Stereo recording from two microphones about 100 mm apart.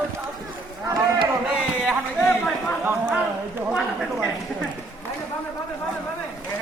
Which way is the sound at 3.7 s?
Centre (ahead or behind).